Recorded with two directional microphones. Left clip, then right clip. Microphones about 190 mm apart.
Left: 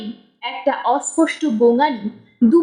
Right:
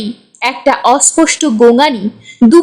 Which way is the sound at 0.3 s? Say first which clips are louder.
Right 9 dB; 35° right (ahead or behind).